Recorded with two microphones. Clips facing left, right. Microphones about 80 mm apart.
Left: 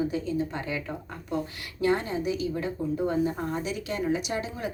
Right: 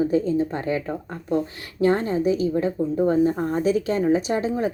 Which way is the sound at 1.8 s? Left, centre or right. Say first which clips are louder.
Right 6 dB; right.